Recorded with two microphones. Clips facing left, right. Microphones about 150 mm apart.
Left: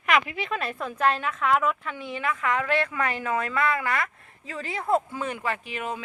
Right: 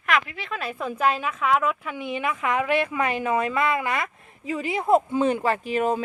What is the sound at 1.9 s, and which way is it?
A woman's voice, 15° right (ahead or behind).